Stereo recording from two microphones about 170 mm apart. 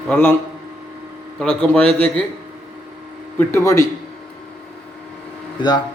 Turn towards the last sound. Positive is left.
turn(degrees=25)  # may be behind; listen again after turning